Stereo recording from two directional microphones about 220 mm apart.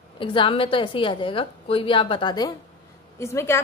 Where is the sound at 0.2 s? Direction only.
25° left (ahead or behind).